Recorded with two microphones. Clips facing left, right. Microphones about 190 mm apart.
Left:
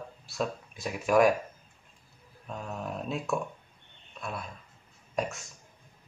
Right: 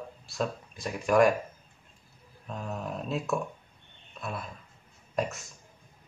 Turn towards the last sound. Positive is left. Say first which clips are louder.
# right 1 dB
turn(degrees=0)  # may be behind; listen again after turning